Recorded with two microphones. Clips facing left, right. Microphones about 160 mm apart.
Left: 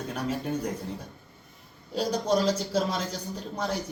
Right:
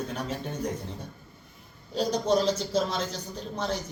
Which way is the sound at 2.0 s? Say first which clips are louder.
Right 1 dB; 10° left (ahead or behind).